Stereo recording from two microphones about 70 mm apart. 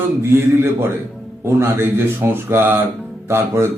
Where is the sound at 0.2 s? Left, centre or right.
Right.